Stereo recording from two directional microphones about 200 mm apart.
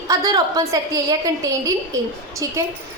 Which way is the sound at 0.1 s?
15° right (ahead or behind).